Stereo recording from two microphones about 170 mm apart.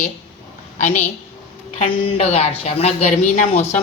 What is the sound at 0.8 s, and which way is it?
A woman's voice, 40° left (ahead or behind).